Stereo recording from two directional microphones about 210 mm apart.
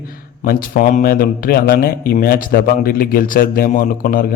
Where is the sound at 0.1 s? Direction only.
45° left (ahead or behind).